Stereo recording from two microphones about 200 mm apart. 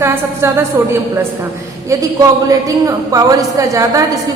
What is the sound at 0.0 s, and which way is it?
Speech, 10° right (ahead or behind).